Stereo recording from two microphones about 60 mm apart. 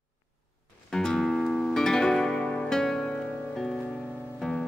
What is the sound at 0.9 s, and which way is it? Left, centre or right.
Music, centre.